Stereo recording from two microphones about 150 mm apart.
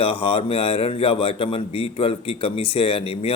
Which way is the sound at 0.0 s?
40° left (ahead or behind).